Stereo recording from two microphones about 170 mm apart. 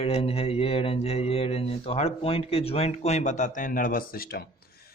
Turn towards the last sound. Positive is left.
turn(degrees=60)  # may be behind; listen again after turning